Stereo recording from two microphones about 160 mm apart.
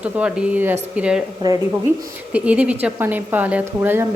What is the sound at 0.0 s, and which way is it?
A woman's voice, 5° right (ahead or behind).